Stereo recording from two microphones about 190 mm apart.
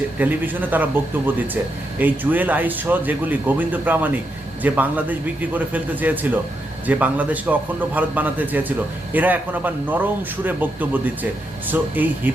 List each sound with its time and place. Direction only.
0.2 s speech: 10° right (ahead or behind)
2.0 s speech: 10° right (ahead or behind)